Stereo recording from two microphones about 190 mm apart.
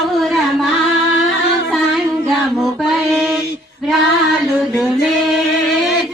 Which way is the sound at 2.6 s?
Centre (ahead or behind).